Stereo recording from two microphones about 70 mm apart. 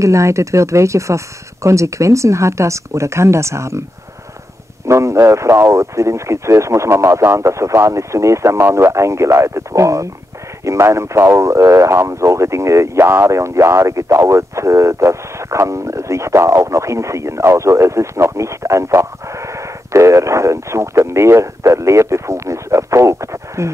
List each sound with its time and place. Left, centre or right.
0.0 s speech: right
4.8 s speech: right